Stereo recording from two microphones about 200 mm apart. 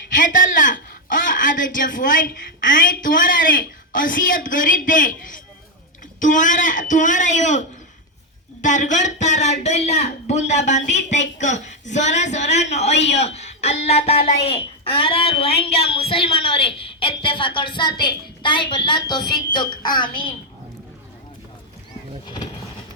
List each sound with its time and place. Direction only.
0.1 s a woman's voice: 40° left (ahead or behind)
8.6 s a woman's voice: 40° left (ahead or behind); by 20.3 s 25° left (ahead or behind)